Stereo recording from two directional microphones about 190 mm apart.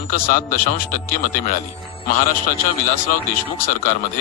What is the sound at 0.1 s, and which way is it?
A man's voice, 50° left (ahead or behind).